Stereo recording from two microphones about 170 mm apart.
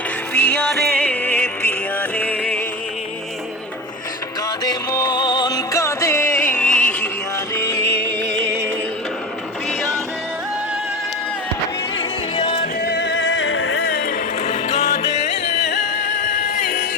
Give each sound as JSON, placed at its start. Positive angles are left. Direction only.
{"t": 0.3, "sound": "music", "side_deg": 10}
{"t": 4.6, "sound": "music", "side_deg": 25}
{"t": 8.2, "sound": "music", "side_deg": -90}
{"t": 11.9, "sound": "music", "side_deg": 30}
{"t": 12.8, "sound": "music", "side_deg": 85}